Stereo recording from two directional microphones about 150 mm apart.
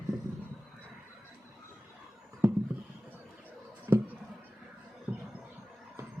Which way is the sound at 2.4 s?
15° right (ahead or behind).